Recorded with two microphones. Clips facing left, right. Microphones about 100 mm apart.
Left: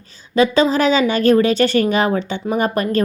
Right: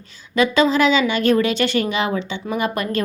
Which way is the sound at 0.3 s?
35° left (ahead or behind).